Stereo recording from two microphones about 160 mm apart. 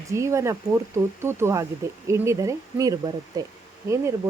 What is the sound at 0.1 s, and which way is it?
Speech, 20° right (ahead or behind).